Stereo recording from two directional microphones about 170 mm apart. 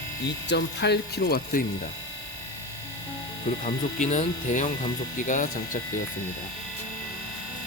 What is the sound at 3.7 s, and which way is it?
Speech, 45° left (ahead or behind).